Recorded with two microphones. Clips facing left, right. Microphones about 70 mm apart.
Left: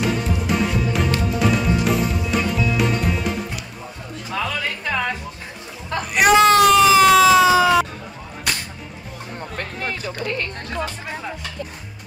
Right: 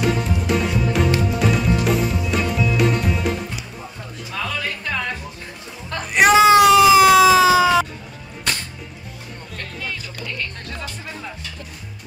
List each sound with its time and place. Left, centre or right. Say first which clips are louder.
0.0 s music: right 1 dB; centre
4.8 s music: left 4 dB; centre
6.2 s a sound: right 1 dB; centre
9.8 s music: left 4 dB; left